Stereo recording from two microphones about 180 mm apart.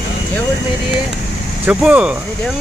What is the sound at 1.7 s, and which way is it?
Speech, 5° right (ahead or behind).